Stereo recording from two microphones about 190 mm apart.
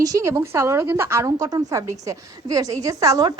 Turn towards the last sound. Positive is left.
turn(degrees=-20)  # may be behind; listen again after turning